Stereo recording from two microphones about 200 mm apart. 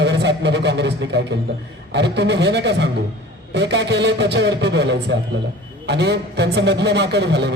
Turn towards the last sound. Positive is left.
turn(degrees=-60)  # may be behind; listen again after turning